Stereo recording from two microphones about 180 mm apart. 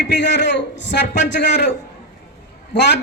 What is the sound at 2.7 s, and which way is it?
Speech, 70° left (ahead or behind).